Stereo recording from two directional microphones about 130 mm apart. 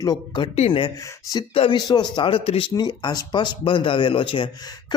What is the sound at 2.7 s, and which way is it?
A man's voice, 30° left (ahead or behind).